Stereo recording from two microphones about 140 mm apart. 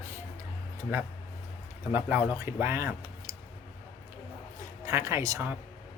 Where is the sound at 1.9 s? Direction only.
10° right (ahead or behind).